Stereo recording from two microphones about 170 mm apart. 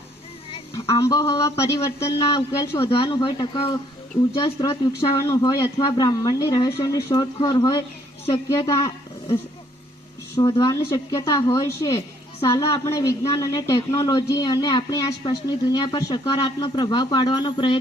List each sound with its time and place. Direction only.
0.9 s a woman's voice: 20° left (ahead or behind)
10.3 s a woman's voice: 20° left (ahead or behind)